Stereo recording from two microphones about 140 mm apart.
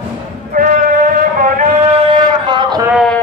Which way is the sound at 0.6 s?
80° right.